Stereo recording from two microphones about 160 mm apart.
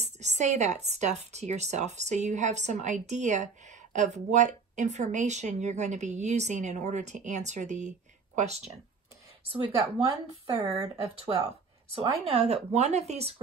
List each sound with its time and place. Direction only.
0.0 s a woman's voice: 45° right (ahead or behind)
12.3 s speech: 40° right (ahead or behind)